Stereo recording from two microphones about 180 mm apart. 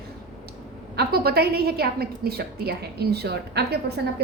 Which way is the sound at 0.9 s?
60° right (ahead or behind).